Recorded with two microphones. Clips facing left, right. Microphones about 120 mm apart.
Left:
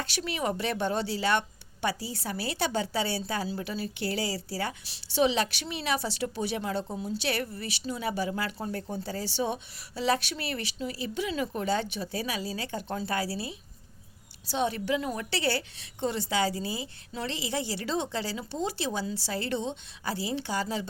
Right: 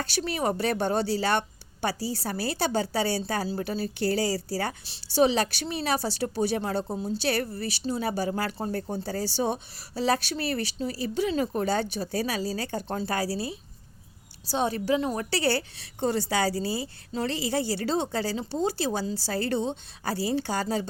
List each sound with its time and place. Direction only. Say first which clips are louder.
0.0 s a woman's voice: right 3 dB; 40° right (ahead or behind)